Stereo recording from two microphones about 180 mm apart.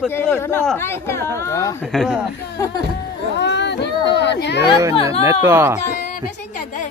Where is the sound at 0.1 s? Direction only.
15° left (ahead or behind).